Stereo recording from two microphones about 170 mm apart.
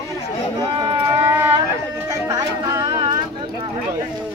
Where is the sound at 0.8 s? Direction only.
15° right (ahead or behind).